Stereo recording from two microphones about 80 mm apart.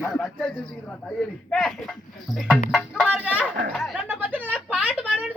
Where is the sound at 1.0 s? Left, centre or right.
Centre.